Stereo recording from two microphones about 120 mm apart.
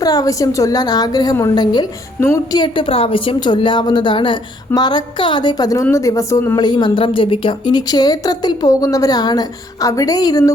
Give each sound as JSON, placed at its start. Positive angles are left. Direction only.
{"t": 0.0, "sound": "a woman's voice", "side_deg": 30}
{"t": 2.2, "sound": "speech", "side_deg": 25}
{"t": 2.6, "sound": "a woman's voice", "side_deg": 45}
{"t": 6.6, "sound": "a woman's voice", "side_deg": 40}